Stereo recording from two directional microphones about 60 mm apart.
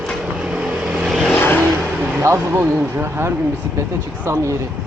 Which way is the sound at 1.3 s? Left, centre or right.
Left.